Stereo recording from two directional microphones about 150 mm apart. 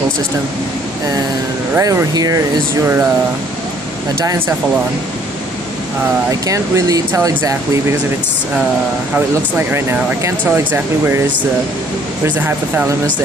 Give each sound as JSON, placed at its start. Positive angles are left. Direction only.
{"t": 1.8, "sound": "speech", "side_deg": -20}
{"t": 6.4, "sound": "speech", "side_deg": -20}
{"t": 9.1, "sound": "speech", "side_deg": -15}
{"t": 12.3, "sound": "speech", "side_deg": -10}